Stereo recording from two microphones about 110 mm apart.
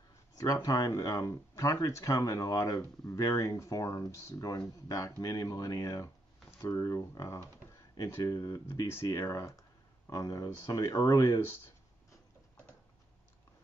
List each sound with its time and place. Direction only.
0.4 s speech: 35° left (ahead or behind)